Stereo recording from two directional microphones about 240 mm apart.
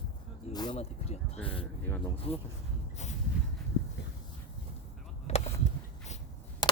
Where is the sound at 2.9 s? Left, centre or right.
Left.